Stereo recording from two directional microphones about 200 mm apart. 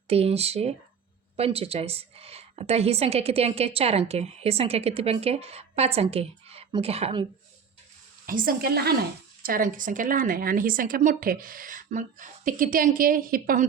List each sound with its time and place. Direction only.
0.1 s a woman's voice: 30° right (ahead or behind)
8.3 s a woman's voice: 45° right (ahead or behind)